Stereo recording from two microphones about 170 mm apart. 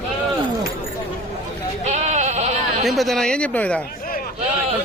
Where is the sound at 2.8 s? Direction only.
Centre (ahead or behind).